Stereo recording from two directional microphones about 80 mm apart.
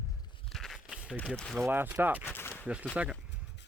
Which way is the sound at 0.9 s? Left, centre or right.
Centre.